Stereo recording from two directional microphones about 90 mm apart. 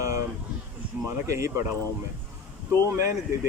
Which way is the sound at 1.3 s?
35° right (ahead or behind).